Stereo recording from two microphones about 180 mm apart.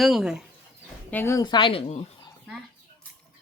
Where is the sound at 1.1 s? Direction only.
15° left (ahead or behind).